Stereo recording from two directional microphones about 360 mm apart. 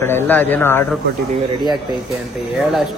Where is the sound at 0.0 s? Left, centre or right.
Centre.